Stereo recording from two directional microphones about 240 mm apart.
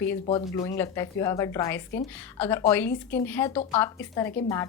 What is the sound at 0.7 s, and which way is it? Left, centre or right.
A woman's voice, centre.